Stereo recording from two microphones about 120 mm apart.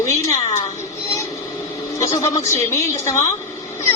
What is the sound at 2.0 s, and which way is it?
A woman's voice, 30° left (ahead or behind).